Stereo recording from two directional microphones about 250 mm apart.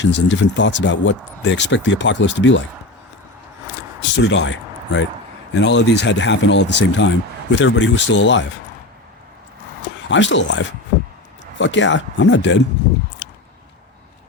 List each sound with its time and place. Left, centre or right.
0.0 s speech: left
4.2 s speech: left
10.1 s speech: left